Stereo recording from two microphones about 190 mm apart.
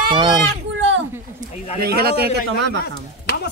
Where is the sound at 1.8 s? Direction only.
55° right (ahead or behind).